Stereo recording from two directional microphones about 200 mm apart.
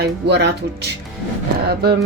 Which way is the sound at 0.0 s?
60° right (ahead or behind).